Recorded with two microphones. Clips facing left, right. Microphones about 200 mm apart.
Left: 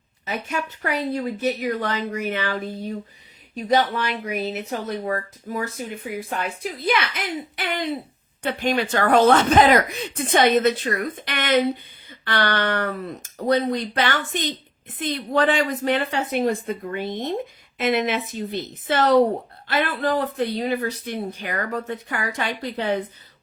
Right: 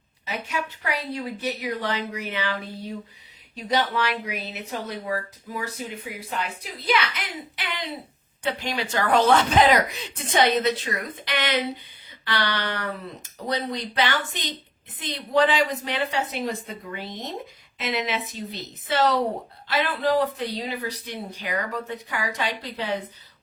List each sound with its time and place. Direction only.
0.3 s speech: 50° left (ahead or behind)